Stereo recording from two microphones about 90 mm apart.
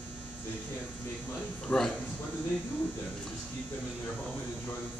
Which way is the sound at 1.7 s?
15° left (ahead or behind).